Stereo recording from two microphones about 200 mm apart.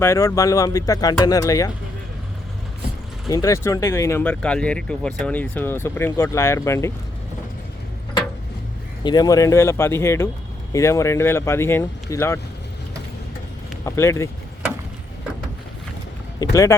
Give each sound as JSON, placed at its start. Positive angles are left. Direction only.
{"t": 0.0, "sound": "speech", "side_deg": 15}
{"t": 3.2, "sound": "speech", "side_deg": 15}
{"t": 9.0, "sound": "speech", "side_deg": 20}
{"t": 13.8, "sound": "speech", "side_deg": 15}
{"t": 16.4, "sound": "speech", "side_deg": 15}